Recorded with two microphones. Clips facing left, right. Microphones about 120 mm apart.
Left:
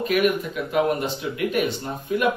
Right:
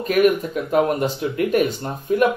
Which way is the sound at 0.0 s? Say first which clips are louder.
Right 4 dB; 40° right (ahead or behind).